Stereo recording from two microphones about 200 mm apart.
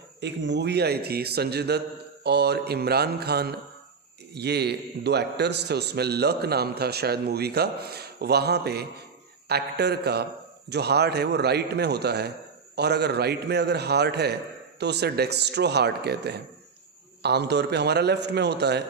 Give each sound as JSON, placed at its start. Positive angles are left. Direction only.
{"t": 0.2, "sound": "a man's voice", "side_deg": -60}